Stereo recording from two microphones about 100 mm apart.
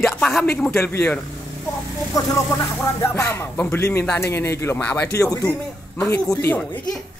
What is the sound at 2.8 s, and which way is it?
Music, 25° left (ahead or behind).